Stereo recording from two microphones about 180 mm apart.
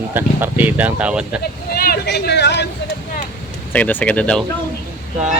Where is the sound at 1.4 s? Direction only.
60° left (ahead or behind).